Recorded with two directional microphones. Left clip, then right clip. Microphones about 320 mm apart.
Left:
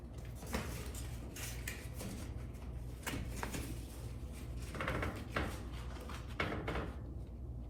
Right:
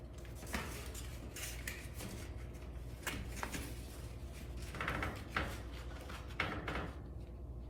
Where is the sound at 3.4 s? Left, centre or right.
Centre.